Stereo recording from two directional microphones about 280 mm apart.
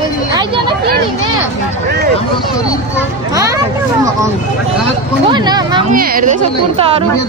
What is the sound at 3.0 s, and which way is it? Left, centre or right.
Speech, centre.